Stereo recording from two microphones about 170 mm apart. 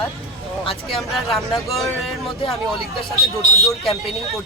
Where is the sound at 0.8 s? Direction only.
Centre (ahead or behind).